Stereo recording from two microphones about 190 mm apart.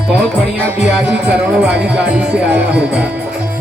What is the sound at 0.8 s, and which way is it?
Music, 5° right (ahead or behind).